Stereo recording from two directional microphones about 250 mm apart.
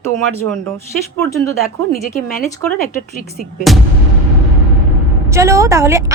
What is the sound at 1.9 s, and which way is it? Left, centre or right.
Speech, left.